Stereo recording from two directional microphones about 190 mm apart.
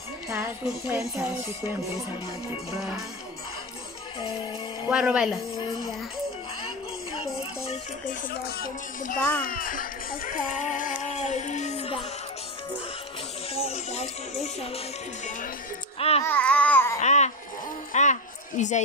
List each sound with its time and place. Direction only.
0.3 s speech: 15° right (ahead or behind)
4.8 s speech: 5° right (ahead or behind)
8.1 s music: 50° left (ahead or behind); by 12.0 s 35° left (ahead or behind)
13.6 s music: 35° left (ahead or behind)
16.0 s music: 30° left (ahead or behind)
16.3 s babbling: 5° left (ahead or behind)
17.0 s music: 35° left (ahead or behind)
17.9 s a sound: 40° left (ahead or behind)
18.6 s music: 40° left (ahead or behind)